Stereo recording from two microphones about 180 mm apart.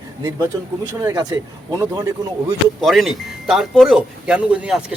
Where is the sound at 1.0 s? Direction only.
20° right (ahead or behind).